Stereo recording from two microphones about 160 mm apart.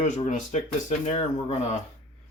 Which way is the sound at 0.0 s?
50° left (ahead or behind).